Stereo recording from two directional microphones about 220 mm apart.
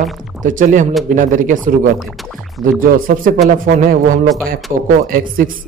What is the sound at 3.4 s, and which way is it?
A man's voice, 35° right (ahead or behind).